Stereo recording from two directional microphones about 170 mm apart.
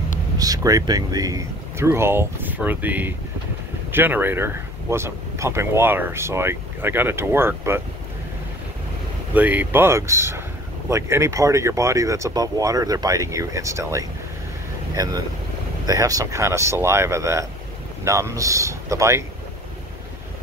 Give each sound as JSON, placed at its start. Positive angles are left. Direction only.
{"t": 0.4, "sound": "speech", "side_deg": -20}
{"t": 9.3, "sound": "speech", "side_deg": -10}